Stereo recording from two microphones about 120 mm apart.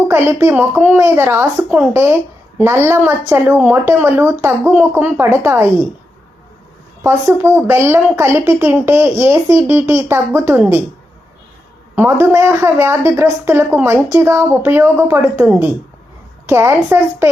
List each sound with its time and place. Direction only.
0.1 s a woman's voice: 20° right (ahead or behind)
7.0 s a woman's voice: 20° right (ahead or behind)
11.9 s a woman's voice: 20° right (ahead or behind)